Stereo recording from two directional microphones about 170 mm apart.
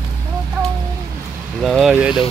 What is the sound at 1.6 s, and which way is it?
Speech, centre (ahead or behind).